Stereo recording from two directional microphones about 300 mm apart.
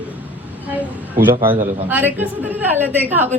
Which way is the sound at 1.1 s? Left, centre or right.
Right.